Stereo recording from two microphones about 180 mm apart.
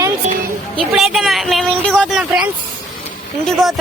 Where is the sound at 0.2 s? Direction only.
40° right (ahead or behind).